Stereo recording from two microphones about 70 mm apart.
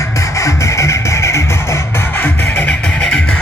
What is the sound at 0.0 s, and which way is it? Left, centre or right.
Music, left.